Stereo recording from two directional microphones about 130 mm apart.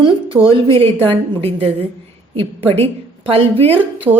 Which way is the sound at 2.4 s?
50° right (ahead or behind).